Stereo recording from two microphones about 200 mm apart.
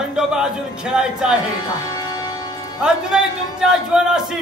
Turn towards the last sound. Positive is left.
turn(degrees=-5)  # may be behind; listen again after turning